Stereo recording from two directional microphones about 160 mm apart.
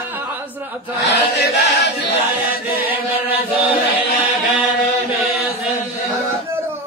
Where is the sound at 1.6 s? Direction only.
90° left.